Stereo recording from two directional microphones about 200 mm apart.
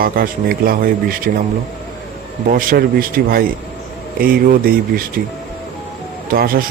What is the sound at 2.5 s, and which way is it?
Speech, 45° right (ahead or behind).